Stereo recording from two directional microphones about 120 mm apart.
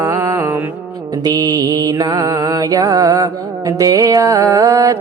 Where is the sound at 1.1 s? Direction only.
35° right (ahead or behind).